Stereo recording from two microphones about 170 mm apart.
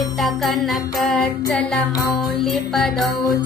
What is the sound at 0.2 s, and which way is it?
Music, centre (ahead or behind).